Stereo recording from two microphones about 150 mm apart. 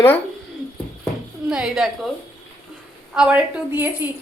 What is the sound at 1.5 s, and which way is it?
Speech, 5° right (ahead or behind).